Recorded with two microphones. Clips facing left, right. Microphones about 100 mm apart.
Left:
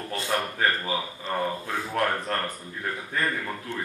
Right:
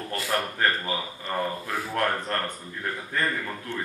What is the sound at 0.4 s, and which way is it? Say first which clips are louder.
Speech: even; 5° left (ahead or behind).